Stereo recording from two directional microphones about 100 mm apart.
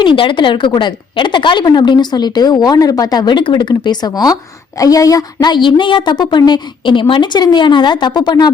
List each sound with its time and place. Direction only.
0.0 s a woman's voice: 55° left (ahead or behind)